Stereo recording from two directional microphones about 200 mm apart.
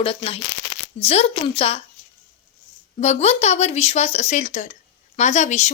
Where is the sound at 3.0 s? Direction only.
35° left (ahead or behind).